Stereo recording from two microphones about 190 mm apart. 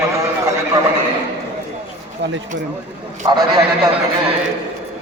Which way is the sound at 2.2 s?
65° right (ahead or behind).